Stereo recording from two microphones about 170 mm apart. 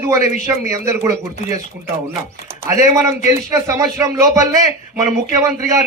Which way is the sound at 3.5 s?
20° right (ahead or behind).